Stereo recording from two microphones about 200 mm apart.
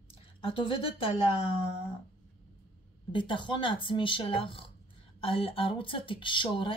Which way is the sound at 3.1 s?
25° left (ahead or behind).